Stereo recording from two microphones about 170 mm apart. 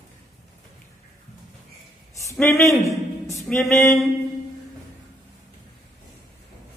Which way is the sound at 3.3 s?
Centre (ahead or behind).